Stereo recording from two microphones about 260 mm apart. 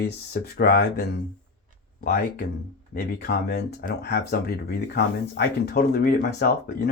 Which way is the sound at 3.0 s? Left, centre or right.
Left.